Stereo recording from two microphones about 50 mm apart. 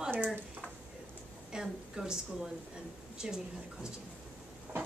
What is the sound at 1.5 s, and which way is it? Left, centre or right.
Speech, centre.